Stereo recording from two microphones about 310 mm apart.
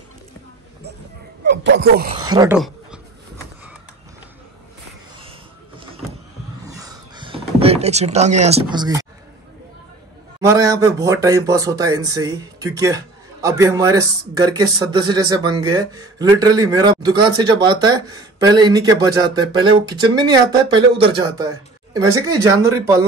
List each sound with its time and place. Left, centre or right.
1.4 s speech: right
2.2 s speech: centre
6.6 s a sound: centre
10.4 s speech: centre